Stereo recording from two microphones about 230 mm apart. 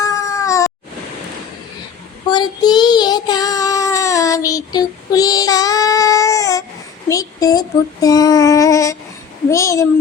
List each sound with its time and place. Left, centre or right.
0.0 s cat: centre
2.3 s child singing: centre
7.1 s a sound: centre
8.0 s child singing: centre